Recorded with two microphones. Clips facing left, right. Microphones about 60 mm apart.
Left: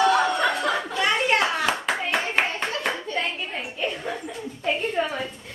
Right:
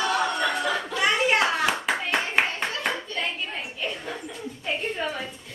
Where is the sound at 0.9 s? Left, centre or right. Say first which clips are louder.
Right 1 dB; centre.